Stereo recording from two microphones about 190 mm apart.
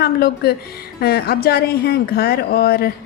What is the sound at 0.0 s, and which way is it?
Speech, 55° left (ahead or behind).